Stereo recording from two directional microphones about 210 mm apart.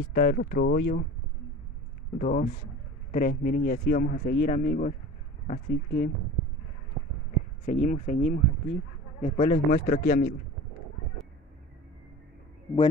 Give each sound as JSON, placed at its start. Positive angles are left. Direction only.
{"t": 0.1, "sound": "speech", "side_deg": 50}
{"t": 2.1, "sound": "speech", "side_deg": 40}
{"t": 7.6, "sound": "speech", "side_deg": 35}